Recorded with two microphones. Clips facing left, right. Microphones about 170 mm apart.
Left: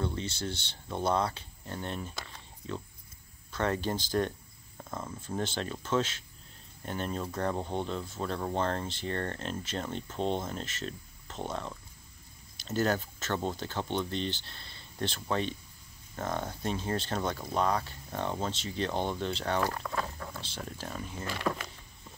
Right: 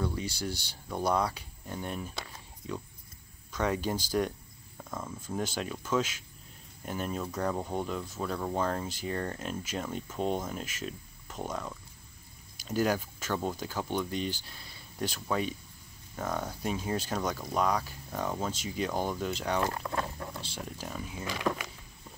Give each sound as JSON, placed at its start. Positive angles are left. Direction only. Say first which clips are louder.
{"t": 0.5, "sound": "speech", "louder": "right 1 dB", "side_deg": 25}
{"t": 1.1, "sound": "speech", "louder": "even", "side_deg": -10}
{"t": 4.7, "sound": "cricket", "louder": "even", "side_deg": 5}
{"t": 5.2, "sound": "speech", "louder": "even", "side_deg": -10}
{"t": 7.3, "sound": "cricket", "louder": "even", "side_deg": -5}
{"t": 8.5, "sound": "speech", "louder": "even", "side_deg": -5}
{"t": 19.6, "sound": "speech", "louder": "right 1 dB", "side_deg": -25}
{"t": 20.3, "sound": "speech", "louder": "right 1 dB", "side_deg": -10}